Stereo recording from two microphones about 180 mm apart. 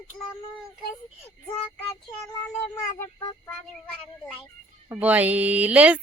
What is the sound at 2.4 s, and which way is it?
Speech, 10° left (ahead or behind).